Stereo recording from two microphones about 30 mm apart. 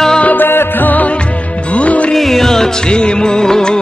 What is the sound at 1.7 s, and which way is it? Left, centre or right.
Music, left.